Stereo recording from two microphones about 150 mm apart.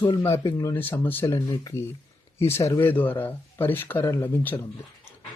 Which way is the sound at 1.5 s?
25° left (ahead or behind).